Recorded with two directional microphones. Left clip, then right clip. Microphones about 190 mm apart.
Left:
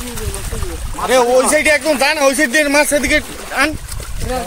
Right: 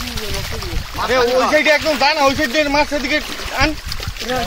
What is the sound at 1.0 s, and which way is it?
Speech, 70° left (ahead or behind).